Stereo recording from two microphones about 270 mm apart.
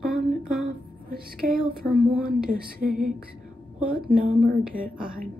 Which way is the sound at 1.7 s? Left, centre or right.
Right.